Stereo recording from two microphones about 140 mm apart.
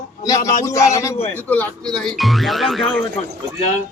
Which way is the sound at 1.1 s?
50° left (ahead or behind).